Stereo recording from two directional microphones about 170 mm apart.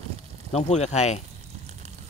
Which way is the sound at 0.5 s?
40° left (ahead or behind).